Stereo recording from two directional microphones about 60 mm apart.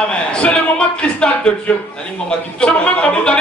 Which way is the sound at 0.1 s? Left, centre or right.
Centre.